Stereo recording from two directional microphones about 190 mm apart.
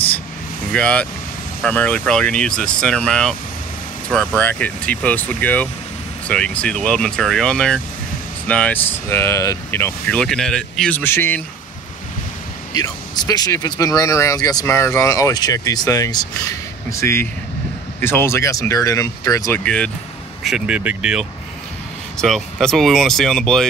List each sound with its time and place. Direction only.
0.7 s speech: 5° left (ahead or behind)
12.7 s speech: 20° left (ahead or behind)
19.6 s speech: 5° left (ahead or behind)